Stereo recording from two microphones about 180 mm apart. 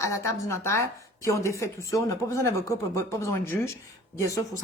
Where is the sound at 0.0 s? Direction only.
15° left (ahead or behind).